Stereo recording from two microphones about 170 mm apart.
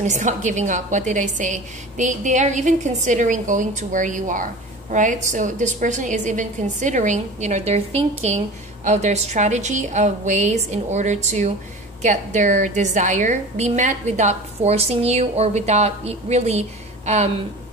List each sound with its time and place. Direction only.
0.0 s a woman's voice: 45° right (ahead or behind)